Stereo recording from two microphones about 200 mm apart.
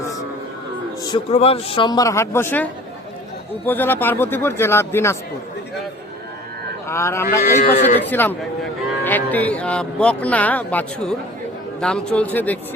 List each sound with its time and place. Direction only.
1.1 s a man's voice: 30° left (ahead or behind); by 2.6 s 10° left (ahead or behind)
3.7 s a man's voice: 10° left (ahead or behind)
6.8 s a man's voice: 15° left (ahead or behind)
7.6 s speech: 50° left (ahead or behind)
8.1 s a man's voice: 10° left (ahead or behind)